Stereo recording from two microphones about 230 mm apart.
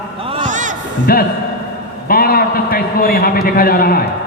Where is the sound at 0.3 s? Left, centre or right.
Right.